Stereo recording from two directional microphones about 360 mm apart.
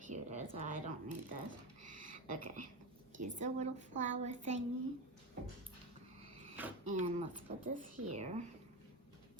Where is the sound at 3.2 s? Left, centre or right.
Centre.